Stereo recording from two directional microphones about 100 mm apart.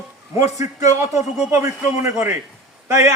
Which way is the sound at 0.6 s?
30° right (ahead or behind).